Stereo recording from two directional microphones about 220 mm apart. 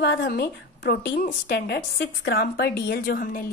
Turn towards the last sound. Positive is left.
turn(degrees=40)  # may be behind; listen again after turning